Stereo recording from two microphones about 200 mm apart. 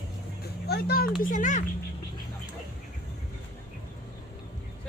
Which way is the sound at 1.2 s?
40° left (ahead or behind).